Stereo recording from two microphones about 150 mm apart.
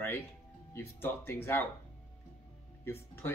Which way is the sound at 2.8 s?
15° left (ahead or behind).